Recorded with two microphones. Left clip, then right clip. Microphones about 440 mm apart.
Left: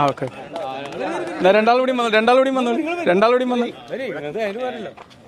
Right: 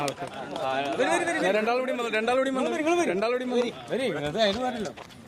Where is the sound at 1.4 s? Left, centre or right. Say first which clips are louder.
Left 15 dB; left.